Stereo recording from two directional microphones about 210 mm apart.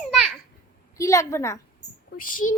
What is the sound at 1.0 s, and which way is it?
Speech, 15° left (ahead or behind).